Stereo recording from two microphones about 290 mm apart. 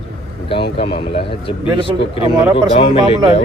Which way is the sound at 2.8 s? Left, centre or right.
Centre.